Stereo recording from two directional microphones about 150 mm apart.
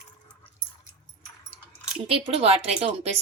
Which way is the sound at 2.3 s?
40° right (ahead or behind).